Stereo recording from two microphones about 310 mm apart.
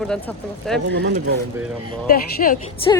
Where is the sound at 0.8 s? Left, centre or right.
Right.